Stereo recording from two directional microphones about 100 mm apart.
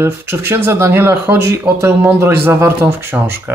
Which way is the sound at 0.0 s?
25° right (ahead or behind).